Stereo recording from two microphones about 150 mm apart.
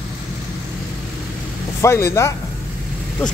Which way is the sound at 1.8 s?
20° left (ahead or behind).